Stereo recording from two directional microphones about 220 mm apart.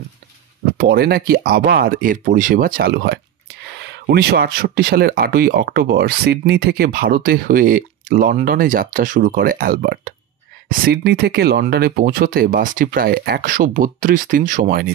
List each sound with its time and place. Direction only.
0.7 s speech: 45° right (ahead or behind)